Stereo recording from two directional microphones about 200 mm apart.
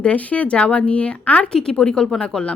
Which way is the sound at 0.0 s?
5° left (ahead or behind).